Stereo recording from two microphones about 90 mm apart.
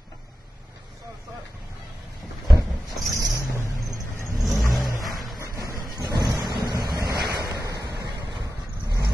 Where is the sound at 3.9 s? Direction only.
35° right (ahead or behind).